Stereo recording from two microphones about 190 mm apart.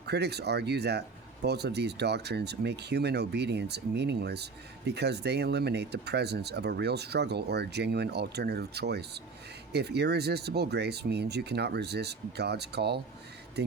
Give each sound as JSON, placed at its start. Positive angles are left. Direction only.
{"t": 0.0, "sound": "speech", "side_deg": -60}